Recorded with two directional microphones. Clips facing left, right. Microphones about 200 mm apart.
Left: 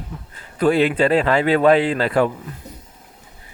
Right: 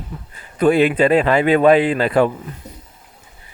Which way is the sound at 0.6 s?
15° right (ahead or behind).